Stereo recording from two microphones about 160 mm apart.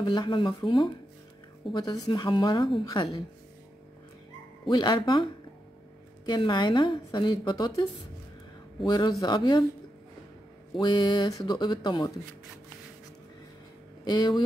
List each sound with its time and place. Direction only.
0.0 s a woman's voice: 30° left (ahead or behind)
4.6 s a woman's voice: 25° left (ahead or behind)
10.8 s a woman's voice: 30° left (ahead or behind)
14.0 s a woman's voice: 25° left (ahead or behind)